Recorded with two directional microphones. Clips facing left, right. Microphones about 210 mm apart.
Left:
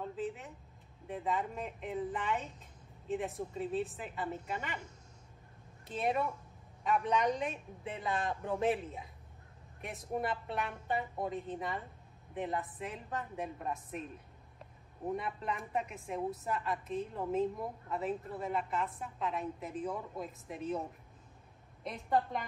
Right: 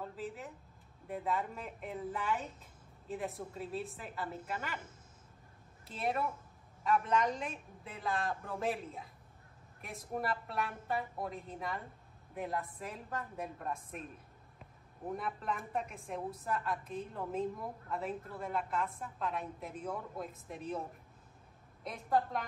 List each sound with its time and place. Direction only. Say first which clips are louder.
0.1 s a woman's voice: left 4 dB; centre (ahead or behind)
15.1 s a woman's voice: left 1 dB; centre (ahead or behind)
21.8 s a woman's voice: even; centre (ahead or behind)